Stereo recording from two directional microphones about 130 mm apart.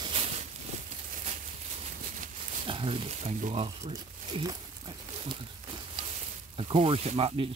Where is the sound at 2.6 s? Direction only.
45° right (ahead or behind); by 3.6 s 60° right (ahead or behind).